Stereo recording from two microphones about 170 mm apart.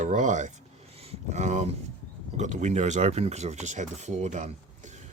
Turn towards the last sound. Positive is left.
turn(degrees=-45)  # may be behind; listen again after turning